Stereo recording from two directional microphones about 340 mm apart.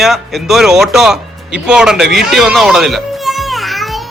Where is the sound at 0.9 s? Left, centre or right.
Centre.